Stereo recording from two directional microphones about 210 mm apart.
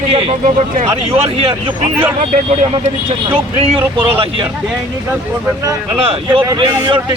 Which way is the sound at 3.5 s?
25° right (ahead or behind).